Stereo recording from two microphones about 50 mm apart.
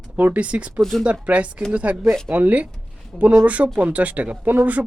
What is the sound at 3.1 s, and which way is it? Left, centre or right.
Speech, centre.